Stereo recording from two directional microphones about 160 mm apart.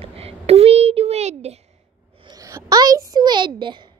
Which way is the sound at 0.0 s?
40° right (ahead or behind).